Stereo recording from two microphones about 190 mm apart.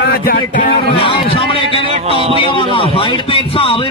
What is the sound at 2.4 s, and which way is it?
A man's voice, 25° left (ahead or behind).